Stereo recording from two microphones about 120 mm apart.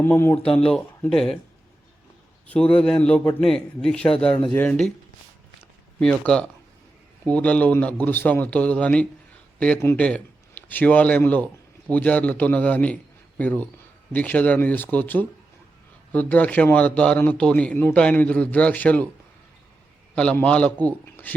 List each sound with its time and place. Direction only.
0.0 s speech: 20° left (ahead or behind)
0.5 s speech: 5° left (ahead or behind)
2.5 s speech: 10° left (ahead or behind)
6.0 s speech: 5° left (ahead or behind)
20.3 s speech: 10° left (ahead or behind)